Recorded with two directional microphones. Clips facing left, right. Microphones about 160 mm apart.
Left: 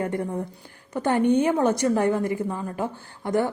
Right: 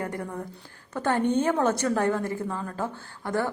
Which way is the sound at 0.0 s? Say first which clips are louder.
Left 5 dB; 20° left (ahead or behind).